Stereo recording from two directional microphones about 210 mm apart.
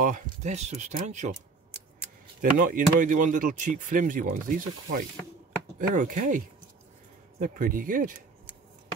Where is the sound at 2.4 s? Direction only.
40° right (ahead or behind).